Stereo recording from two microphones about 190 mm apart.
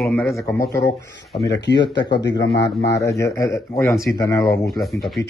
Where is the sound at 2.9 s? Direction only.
15° left (ahead or behind).